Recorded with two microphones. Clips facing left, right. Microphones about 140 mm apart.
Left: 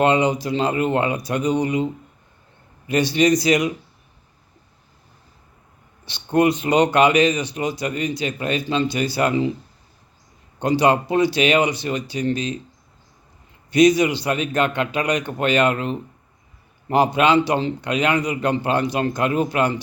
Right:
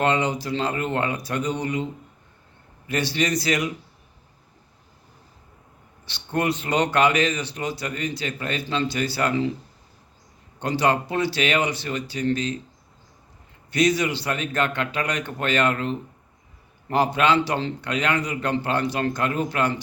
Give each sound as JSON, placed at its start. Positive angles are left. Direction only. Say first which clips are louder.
{"t": 0.0, "sound": "a man's voice", "louder": "left 5 dB", "side_deg": 15}
{"t": 6.1, "sound": "a man's voice", "louder": "left 7 dB", "side_deg": 15}
{"t": 10.6, "sound": "a man's voice", "louder": "left 5 dB", "side_deg": 15}
{"t": 13.7, "sound": "a man's voice", "louder": "left 6 dB", "side_deg": 15}